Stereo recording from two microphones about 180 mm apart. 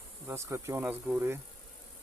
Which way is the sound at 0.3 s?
15° right (ahead or behind).